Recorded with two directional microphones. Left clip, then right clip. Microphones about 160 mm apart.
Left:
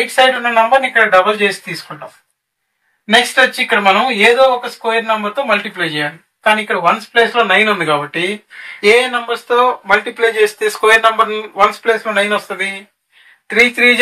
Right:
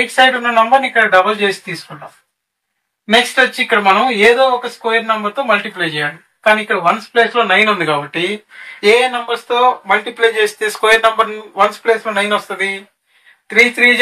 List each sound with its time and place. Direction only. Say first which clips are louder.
0.0 s speech: even; centre (ahead or behind)
3.1 s speech: left 1 dB; 5° right (ahead or behind)
6.7 s speech: left 1 dB; centre (ahead or behind); by 13.9 s 20° right (ahead or behind)